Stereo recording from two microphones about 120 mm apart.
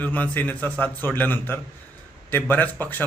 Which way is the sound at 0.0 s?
15° left (ahead or behind).